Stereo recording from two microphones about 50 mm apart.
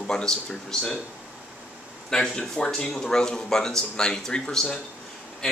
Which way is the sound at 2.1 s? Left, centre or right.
Centre.